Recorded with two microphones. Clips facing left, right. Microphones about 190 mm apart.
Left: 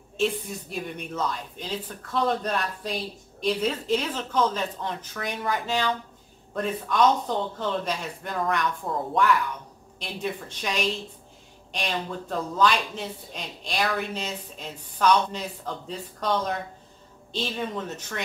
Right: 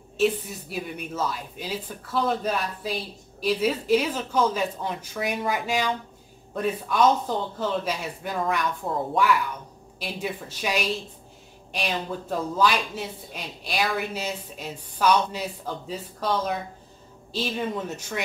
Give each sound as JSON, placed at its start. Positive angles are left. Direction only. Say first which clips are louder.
{"t": 0.2, "sound": "speech", "louder": "right 3 dB", "side_deg": -5}